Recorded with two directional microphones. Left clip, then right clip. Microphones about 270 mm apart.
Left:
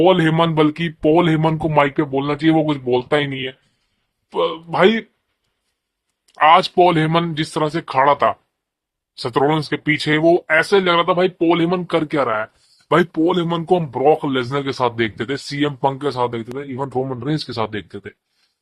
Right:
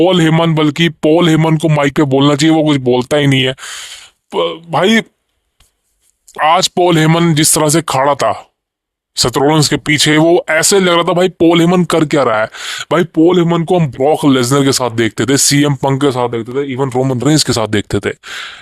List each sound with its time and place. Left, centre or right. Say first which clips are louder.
0.0 s speech: right 4 dB; right
6.3 s speech: right 1 dB; right